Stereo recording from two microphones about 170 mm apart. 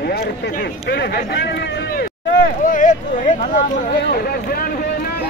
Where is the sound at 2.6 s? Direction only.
50° left (ahead or behind).